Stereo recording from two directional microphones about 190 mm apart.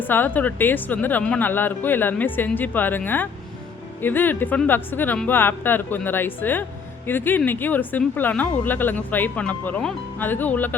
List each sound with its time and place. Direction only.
0.0 s speech: 10° left (ahead or behind)